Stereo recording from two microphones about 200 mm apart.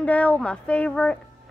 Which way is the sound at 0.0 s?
5° left (ahead or behind).